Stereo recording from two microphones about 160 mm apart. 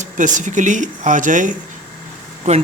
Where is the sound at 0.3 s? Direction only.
50° right (ahead or behind).